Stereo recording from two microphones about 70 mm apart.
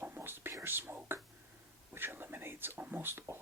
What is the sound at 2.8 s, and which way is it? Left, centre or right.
Speech, right.